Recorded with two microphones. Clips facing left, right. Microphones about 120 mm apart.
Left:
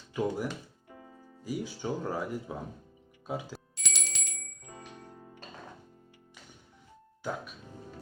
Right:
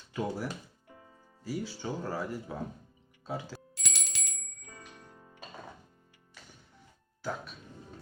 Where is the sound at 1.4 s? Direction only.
15° left (ahead or behind).